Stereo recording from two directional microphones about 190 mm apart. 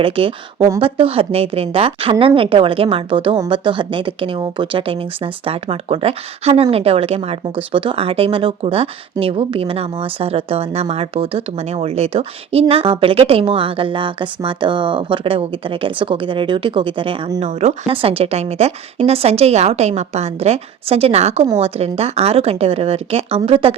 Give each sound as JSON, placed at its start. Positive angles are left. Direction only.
{"t": 0.0, "sound": "speech", "side_deg": -30}